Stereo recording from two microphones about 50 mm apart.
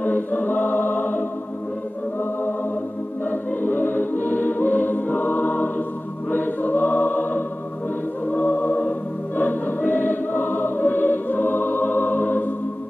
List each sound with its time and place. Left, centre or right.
0.0 s choir: left
3.3 s music: left
6.3 s choir: left
8.3 s music: left
9.4 s choir: left